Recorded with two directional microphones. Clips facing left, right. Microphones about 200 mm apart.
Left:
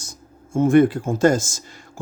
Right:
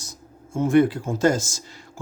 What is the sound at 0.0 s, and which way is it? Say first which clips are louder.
Speech: even; 50° left (ahead or behind).